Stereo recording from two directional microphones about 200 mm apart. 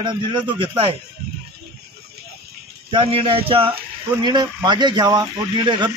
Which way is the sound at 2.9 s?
25° right (ahead or behind).